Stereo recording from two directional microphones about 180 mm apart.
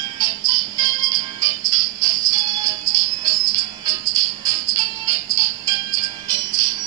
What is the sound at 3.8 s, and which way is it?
Music, 20° right (ahead or behind).